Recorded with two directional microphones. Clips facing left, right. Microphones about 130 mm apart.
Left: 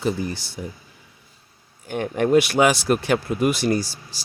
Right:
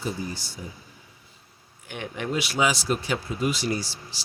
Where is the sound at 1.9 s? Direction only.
50° left (ahead or behind).